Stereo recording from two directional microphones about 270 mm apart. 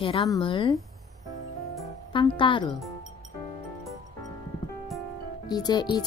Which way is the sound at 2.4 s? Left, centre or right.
Centre.